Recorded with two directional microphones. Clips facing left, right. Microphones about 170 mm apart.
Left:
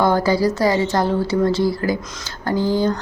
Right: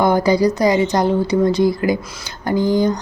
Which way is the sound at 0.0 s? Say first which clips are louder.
Right 2 dB; 15° right (ahead or behind).